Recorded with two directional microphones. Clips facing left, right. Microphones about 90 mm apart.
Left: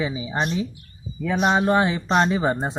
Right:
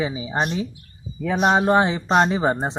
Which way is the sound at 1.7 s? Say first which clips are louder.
Right 2 dB; 30° right (ahead or behind).